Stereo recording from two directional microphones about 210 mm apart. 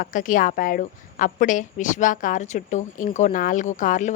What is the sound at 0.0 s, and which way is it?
A woman's voice, 40° left (ahead or behind).